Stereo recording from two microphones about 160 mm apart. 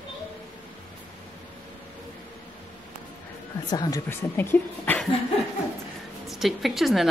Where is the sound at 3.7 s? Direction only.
25° left (ahead or behind).